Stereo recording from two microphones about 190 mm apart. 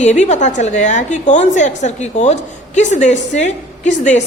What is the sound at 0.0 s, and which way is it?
A woman's voice, 35° left (ahead or behind).